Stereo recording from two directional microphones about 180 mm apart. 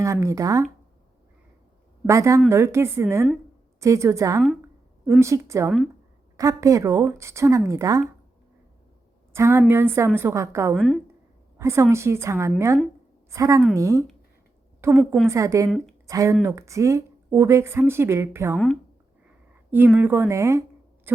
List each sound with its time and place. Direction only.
0.0 s speech: 15° right (ahead or behind)
2.0 s speech: 15° right (ahead or behind)
9.3 s speech: 15° right (ahead or behind)
10.8 s a woman's voice: centre (ahead or behind)
11.5 s a woman's voice: 15° right (ahead or behind)
18.5 s a woman's voice: 5° left (ahead or behind)
19.7 s a woman's voice: 10° right (ahead or behind)